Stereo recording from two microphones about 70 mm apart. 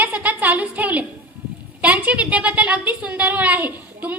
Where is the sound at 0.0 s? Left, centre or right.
Right.